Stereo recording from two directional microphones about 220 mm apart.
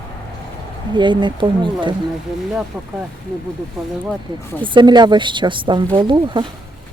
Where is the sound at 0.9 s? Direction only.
20° right (ahead or behind).